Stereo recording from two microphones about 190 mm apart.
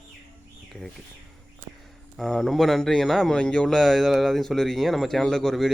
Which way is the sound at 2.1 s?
Centre (ahead or behind).